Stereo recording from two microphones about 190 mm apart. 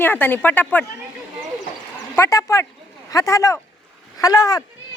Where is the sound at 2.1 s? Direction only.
15° left (ahead or behind).